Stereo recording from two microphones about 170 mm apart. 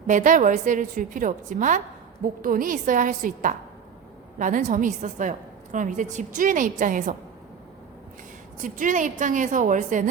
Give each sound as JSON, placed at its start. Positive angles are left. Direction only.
{"t": 0.1, "sound": "a woman's voice", "side_deg": -50}
{"t": 8.5, "sound": "a woman's voice", "side_deg": -50}